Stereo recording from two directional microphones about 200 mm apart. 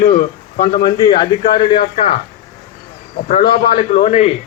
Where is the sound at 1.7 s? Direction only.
30° left (ahead or behind).